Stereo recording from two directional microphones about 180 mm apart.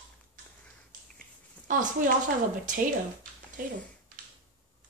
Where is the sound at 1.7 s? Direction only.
50° right (ahead or behind).